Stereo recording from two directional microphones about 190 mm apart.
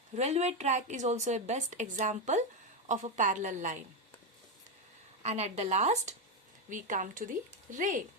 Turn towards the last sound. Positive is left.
turn(degrees=-45)  # may be behind; listen again after turning